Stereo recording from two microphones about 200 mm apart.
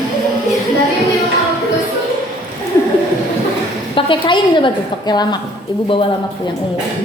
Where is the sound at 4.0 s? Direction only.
25° left (ahead or behind).